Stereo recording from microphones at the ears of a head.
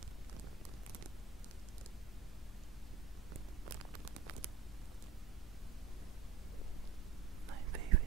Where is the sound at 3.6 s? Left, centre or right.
Right.